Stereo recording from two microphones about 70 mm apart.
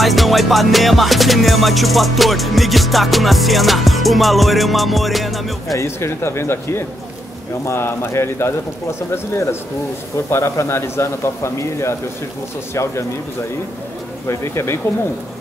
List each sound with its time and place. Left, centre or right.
0.0 s music: centre
5.8 s a man's voice: left
14.2 s speech: left